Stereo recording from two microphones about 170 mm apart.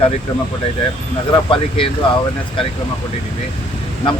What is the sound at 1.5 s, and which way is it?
Speech, 30° left (ahead or behind).